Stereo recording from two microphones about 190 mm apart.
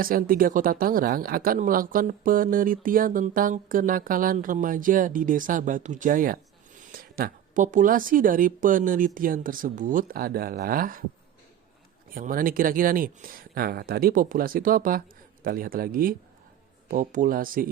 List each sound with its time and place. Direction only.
0.0 s speech: 50° right (ahead or behind)
12.1 s speech: 50° right (ahead or behind)